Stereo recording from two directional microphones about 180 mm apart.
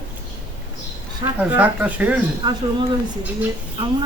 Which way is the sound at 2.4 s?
25° right (ahead or behind).